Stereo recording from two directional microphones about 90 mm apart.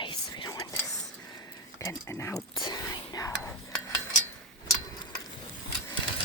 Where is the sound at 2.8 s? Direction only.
35° left (ahead or behind).